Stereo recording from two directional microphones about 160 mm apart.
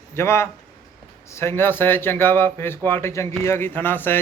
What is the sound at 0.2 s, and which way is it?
A man's voice, 15° left (ahead or behind).